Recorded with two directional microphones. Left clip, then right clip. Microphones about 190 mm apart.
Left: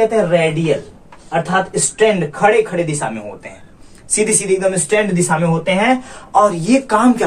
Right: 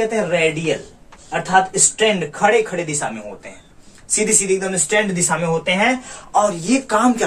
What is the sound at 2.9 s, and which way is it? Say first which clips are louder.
Speech: left 3 dB; 15° left (ahead or behind).